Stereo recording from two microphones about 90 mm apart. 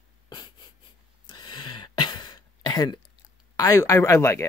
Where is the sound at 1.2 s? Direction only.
55° left (ahead or behind).